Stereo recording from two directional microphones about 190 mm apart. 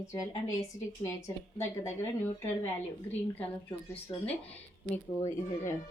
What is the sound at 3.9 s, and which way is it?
A woman's voice, 10° left (ahead or behind).